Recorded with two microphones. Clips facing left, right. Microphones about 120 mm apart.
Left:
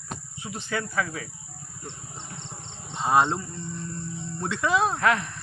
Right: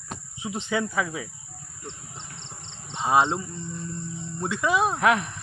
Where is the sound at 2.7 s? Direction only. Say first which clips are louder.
Even; 5° left (ahead or behind).